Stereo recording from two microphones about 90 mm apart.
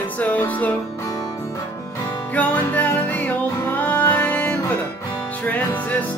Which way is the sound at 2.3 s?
20° left (ahead or behind).